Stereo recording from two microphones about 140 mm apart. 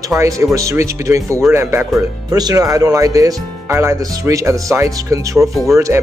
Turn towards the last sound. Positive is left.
turn(degrees=-20)  # may be behind; listen again after turning